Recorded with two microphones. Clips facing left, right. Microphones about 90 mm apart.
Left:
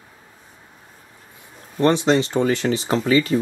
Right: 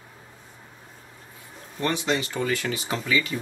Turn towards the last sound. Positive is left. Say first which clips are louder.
# left 8 dB
turn(degrees=40)  # may be behind; listen again after turning